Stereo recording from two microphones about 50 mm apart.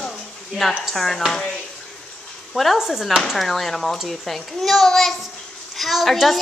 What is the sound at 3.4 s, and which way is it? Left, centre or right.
A child's voice, centre.